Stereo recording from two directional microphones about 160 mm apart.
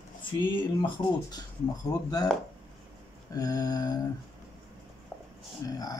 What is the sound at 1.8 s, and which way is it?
Speech, 25° left (ahead or behind).